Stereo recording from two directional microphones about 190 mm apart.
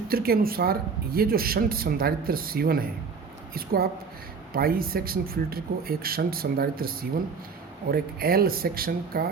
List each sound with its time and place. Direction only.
0.1 s speech: 50° right (ahead or behind)